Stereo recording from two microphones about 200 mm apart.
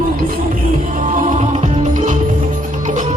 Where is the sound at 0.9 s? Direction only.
40° right (ahead or behind).